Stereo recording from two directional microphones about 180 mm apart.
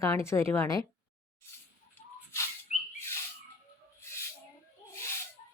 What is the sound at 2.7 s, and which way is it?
Bird, 35° left (ahead or behind).